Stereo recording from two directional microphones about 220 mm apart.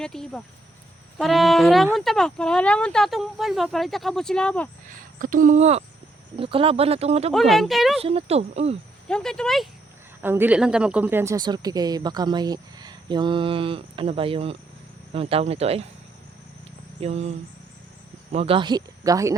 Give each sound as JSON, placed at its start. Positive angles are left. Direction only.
{"t": 0.0, "sound": "speech", "side_deg": 0}
{"t": 4.9, "sound": "speech", "side_deg": -40}
{"t": 7.3, "sound": "speech", "side_deg": 0}
{"t": 7.9, "sound": "speech", "side_deg": -25}
{"t": 9.0, "sound": "speech", "side_deg": 5}
{"t": 10.2, "sound": "speech", "side_deg": -10}
{"t": 17.0, "sound": "speech", "side_deg": -30}